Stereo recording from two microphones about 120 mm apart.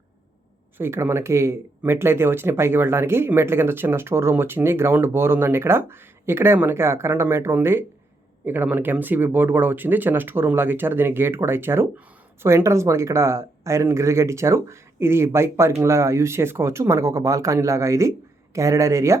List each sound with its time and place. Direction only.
0.8 s speech: 20° right (ahead or behind)